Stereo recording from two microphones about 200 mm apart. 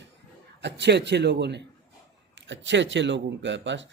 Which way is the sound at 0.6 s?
60° right (ahead or behind).